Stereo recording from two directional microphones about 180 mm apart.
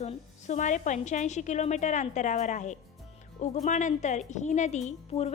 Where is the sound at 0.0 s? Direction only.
40° left (ahead or behind).